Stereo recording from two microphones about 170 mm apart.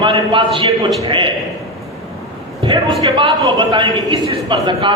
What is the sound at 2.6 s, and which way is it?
A man's voice, 30° right (ahead or behind).